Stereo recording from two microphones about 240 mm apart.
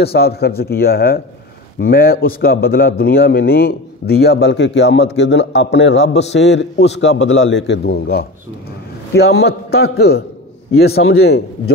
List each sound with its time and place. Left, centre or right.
0.0 s a man's voice: left
11.0 s a man's voice: left
11.2 s a man's voice: left